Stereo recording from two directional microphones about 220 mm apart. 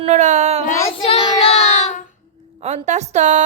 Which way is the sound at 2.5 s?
30° right (ahead or behind).